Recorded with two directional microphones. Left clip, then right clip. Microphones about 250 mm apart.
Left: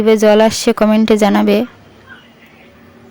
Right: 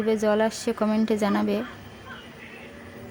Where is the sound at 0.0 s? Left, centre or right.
Left.